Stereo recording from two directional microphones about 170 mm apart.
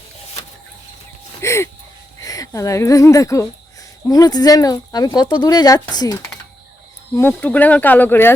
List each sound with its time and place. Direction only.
1.4 s speech: 15° left (ahead or behind)
7.2 s speech: 10° left (ahead or behind)